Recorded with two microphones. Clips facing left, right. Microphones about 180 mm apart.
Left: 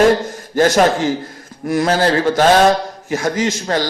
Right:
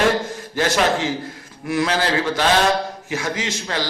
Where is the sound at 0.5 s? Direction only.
45° left (ahead or behind).